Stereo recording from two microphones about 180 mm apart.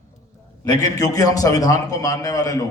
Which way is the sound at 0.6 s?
20° left (ahead or behind).